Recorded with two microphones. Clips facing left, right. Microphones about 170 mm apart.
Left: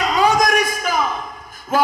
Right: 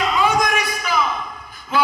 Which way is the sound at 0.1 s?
40° left (ahead or behind).